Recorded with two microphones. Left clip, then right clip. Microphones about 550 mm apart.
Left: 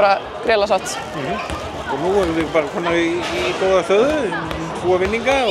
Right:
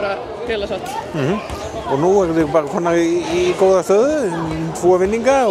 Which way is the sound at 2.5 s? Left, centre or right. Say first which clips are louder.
Right 2 dB; right.